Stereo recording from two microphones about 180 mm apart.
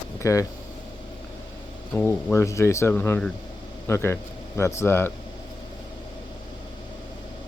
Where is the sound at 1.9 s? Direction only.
10° left (ahead or behind).